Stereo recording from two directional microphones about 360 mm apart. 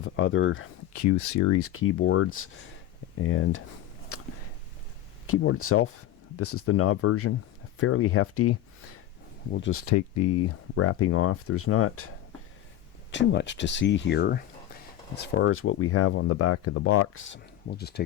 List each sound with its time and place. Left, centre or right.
0.0 s speech: left
0.9 s speech: left
4.1 s a sound: left
5.2 s speech: left
9.8 s speech: left
13.1 s speech: left